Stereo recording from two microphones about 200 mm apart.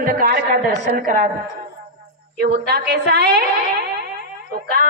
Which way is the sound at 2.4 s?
55° right (ahead or behind).